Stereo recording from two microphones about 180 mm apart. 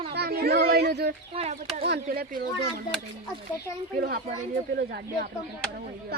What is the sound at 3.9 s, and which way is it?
A child's voice, 60° right (ahead or behind).